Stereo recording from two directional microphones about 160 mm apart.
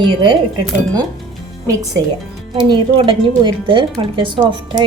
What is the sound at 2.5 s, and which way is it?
Speech, 30° right (ahead or behind).